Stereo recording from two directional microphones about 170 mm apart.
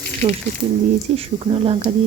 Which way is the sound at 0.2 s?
30° right (ahead or behind).